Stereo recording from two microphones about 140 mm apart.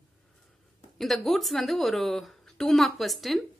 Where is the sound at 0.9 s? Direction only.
Centre (ahead or behind).